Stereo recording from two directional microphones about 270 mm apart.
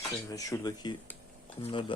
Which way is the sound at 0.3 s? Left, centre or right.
Centre.